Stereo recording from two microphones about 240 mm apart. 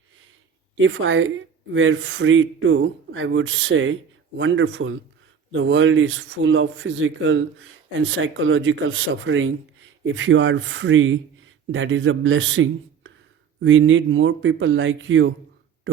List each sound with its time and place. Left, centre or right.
0.8 s speech: right